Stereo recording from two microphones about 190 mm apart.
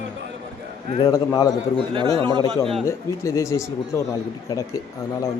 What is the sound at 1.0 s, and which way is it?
Speech, 20° left (ahead or behind).